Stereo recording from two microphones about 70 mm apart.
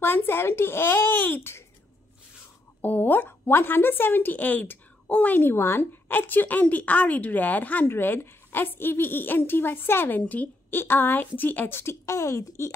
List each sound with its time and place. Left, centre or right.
0.0 s a child's voice: left
2.8 s a woman's voice: left
7.9 s a woman's voice: left
11.8 s speech: left